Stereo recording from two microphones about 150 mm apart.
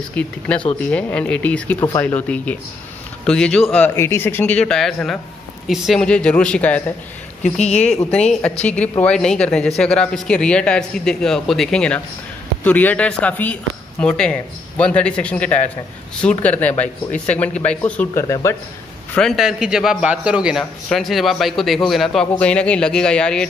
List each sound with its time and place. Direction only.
0.1 s a man's voice: 10° left (ahead or behind)
3.9 s speech: 15° left (ahead or behind)
7.4 s a woman's voice: 50° left (ahead or behind)
8.1 s a man's voice: 5° left (ahead or behind)
18.3 s a man's voice: 20° left (ahead or behind)
19.1 s a man's voice: centre (ahead or behind)